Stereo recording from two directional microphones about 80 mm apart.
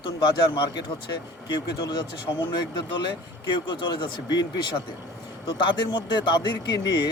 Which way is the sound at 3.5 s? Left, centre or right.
Left.